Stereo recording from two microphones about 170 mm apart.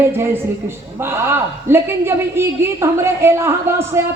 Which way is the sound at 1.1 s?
15° right (ahead or behind).